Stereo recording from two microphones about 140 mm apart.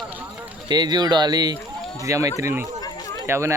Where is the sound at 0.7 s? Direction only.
30° right (ahead or behind).